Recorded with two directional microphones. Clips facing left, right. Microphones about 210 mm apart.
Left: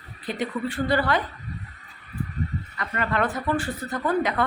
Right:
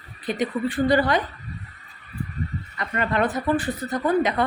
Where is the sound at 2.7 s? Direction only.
25° right (ahead or behind).